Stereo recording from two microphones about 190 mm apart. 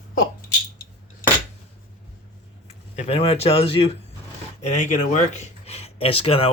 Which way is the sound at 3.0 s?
30° left (ahead or behind).